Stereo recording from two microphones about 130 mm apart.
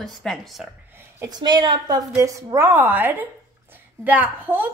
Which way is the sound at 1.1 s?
30° right (ahead or behind).